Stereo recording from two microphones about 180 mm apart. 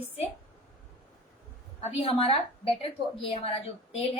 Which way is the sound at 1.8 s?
35° left (ahead or behind).